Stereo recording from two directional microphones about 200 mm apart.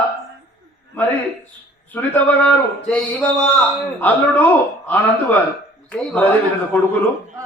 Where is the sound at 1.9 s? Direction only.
10° left (ahead or behind).